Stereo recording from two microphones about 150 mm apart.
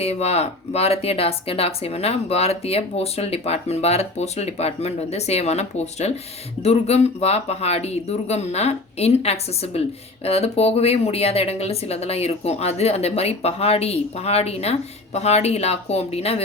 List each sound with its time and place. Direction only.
0.0 s speech: 45° left (ahead or behind)